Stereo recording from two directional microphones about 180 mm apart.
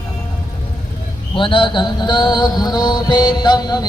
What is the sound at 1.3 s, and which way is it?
Mantra, 25° left (ahead or behind).